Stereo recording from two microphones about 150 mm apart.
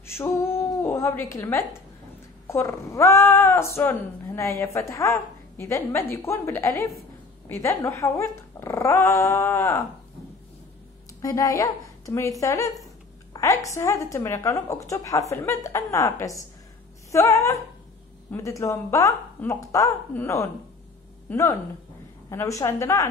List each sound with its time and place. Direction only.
0.0 s a woman's voice: 15° left (ahead or behind)
11.1 s a woman's voice: 20° left (ahead or behind)